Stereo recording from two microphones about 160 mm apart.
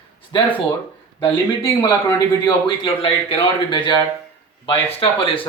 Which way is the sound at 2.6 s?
30° left (ahead or behind).